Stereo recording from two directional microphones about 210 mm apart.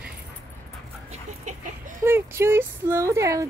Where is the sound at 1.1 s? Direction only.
35° right (ahead or behind).